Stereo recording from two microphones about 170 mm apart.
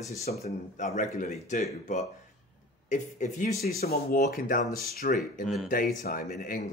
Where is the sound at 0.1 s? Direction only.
40° left (ahead or behind).